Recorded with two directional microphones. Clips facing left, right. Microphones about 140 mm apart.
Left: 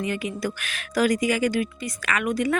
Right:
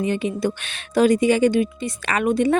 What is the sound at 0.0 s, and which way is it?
A woman's voice, 25° right (ahead or behind).